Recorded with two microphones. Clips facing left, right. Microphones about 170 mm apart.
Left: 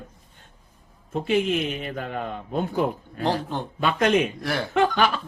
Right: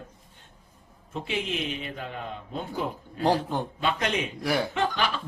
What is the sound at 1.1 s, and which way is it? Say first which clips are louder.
A man's voice: left 8 dB; 50° left (ahead or behind).